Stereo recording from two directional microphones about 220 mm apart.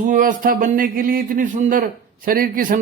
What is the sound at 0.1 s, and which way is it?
A man's voice, 35° right (ahead or behind).